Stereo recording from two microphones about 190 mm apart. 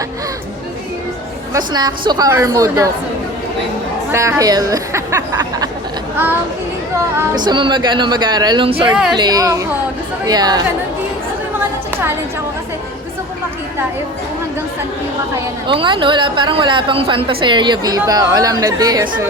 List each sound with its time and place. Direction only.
1.5 s a woman's voice: 20° right (ahead or behind)
4.1 s speech: 15° right (ahead or behind)
7.3 s a woman's voice: 25° right (ahead or behind)
8.9 s a woman's voice: 5° right (ahead or behind)
9.1 s a woman's voice: 20° right (ahead or behind)
15.6 s a woman's voice: 25° right (ahead or behind)